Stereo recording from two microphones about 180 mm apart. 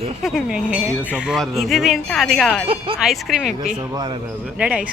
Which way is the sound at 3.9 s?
25° right (ahead or behind).